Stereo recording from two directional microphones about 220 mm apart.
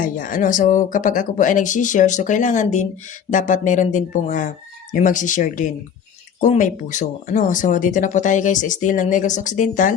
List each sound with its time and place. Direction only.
0.0 s speech: 40° left (ahead or behind)